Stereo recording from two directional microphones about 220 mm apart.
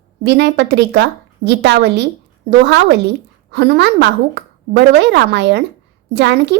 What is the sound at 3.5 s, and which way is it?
A woman's voice, 50° right (ahead or behind).